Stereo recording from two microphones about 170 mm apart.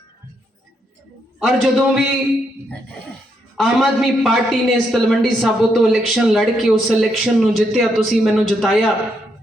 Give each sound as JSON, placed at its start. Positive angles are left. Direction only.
{"t": 1.5, "sound": "a woman's voice", "side_deg": -5}
{"t": 3.6, "sound": "a woman's voice", "side_deg": 0}